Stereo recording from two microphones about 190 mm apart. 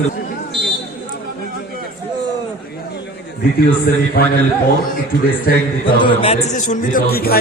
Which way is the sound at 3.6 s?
55° left (ahead or behind).